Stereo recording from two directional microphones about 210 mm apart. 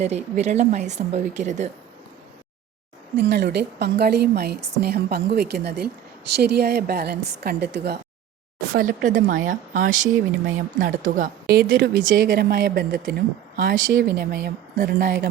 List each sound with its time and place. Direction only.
0.0 s speech: 30° right (ahead or behind)
3.2 s speech: 50° right (ahead or behind)